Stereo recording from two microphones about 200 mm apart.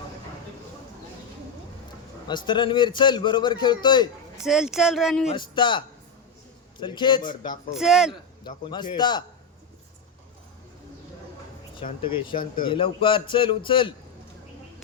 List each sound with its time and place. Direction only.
2.2 s a man's voice: 20° left (ahead or behind)
4.4 s speech: centre (ahead or behind)
5.3 s a man's voice: 25° left (ahead or behind)
7.7 s speech: centre (ahead or behind)
8.4 s a man's voice: 20° left (ahead or behind)
12.3 s speech: 45° left (ahead or behind)
12.6 s a man's voice: 25° left (ahead or behind)